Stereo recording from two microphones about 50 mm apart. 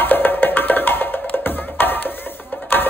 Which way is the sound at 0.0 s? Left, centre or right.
Left.